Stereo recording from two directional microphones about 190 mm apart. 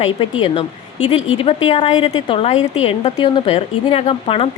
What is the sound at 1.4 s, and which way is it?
A woman's voice, 30° left (ahead or behind).